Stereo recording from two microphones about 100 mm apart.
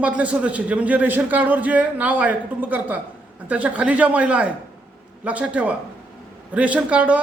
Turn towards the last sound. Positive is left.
turn(degrees=-15)  # may be behind; listen again after turning